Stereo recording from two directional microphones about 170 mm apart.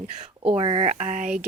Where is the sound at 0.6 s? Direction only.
35° right (ahead or behind).